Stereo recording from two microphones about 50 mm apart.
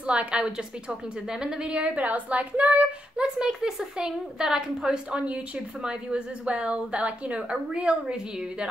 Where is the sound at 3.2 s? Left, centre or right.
Centre.